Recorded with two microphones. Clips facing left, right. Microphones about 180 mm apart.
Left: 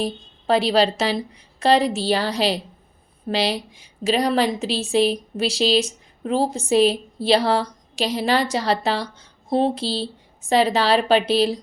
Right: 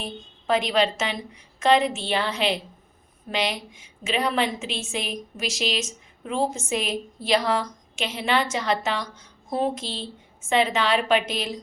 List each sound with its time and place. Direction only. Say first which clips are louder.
0.0 s a woman's voice: left 8 dB; 35° left (ahead or behind)